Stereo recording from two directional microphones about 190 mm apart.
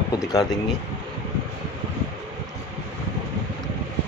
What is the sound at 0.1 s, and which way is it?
Speech, 20° left (ahead or behind).